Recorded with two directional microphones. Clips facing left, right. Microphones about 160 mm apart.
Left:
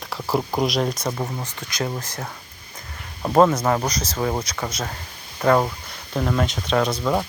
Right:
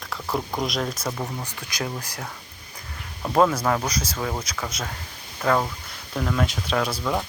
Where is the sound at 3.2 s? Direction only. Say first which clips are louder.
Left 3 dB; 10° left (ahead or behind).